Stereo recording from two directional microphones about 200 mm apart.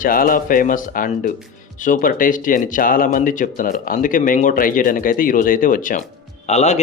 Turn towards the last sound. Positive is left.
turn(degrees=35)  # may be behind; listen again after turning